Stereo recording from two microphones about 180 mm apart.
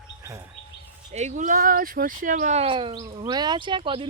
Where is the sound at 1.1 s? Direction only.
40° right (ahead or behind).